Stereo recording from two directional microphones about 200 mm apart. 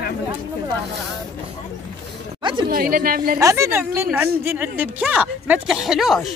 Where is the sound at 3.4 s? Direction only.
15° right (ahead or behind).